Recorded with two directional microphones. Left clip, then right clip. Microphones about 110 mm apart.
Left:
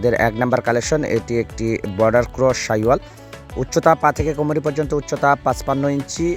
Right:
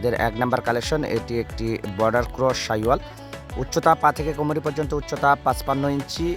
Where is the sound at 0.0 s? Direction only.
65° left (ahead or behind).